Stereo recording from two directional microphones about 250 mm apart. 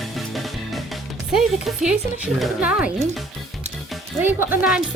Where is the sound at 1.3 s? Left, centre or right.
Centre.